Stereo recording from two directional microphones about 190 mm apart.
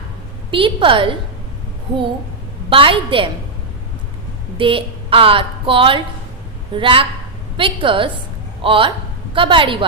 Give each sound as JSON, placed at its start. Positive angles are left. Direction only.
{"t": 0.5, "sound": "a woman's voice", "side_deg": -25}
{"t": 2.6, "sound": "a woman's voice", "side_deg": -30}
{"t": 4.5, "sound": "a woman's voice", "side_deg": -25}